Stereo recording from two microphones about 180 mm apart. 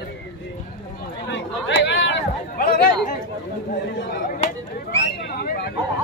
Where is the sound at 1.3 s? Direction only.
80° left.